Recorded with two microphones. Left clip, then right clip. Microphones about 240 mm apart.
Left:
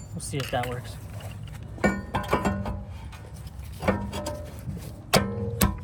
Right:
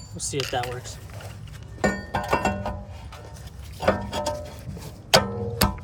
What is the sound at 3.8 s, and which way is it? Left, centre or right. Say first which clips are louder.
Music: right 5 dB; centre.